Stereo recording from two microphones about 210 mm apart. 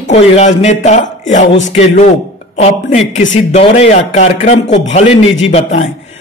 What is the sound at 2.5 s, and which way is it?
A man's voice, 30° left (ahead or behind).